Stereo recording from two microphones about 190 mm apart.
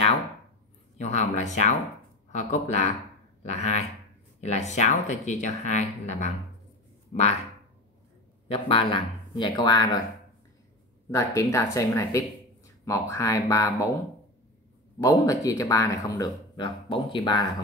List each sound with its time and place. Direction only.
0.9 s speech: 35° left (ahead or behind)
8.5 s speech: 30° left (ahead or behind)
11.1 s speech: 15° left (ahead or behind)
15.0 s speech: 20° left (ahead or behind)